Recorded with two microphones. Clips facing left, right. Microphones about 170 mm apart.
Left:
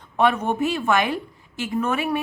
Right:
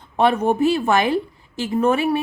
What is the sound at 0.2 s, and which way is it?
A woman's voice, 30° right (ahead or behind).